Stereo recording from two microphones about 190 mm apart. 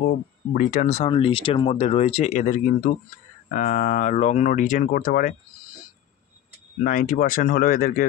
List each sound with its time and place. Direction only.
0.0 s speech: 45° left (ahead or behind)
6.8 s speech: 45° left (ahead or behind)